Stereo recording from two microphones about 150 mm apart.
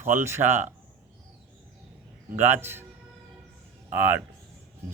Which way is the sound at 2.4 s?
15° right (ahead or behind).